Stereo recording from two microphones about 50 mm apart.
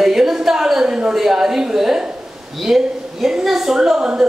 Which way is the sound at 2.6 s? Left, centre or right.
Centre.